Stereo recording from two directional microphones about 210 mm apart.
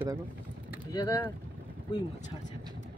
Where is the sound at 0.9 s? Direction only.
15° left (ahead or behind).